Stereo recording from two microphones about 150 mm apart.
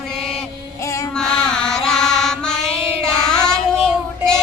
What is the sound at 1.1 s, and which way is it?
Music, 5° left (ahead or behind).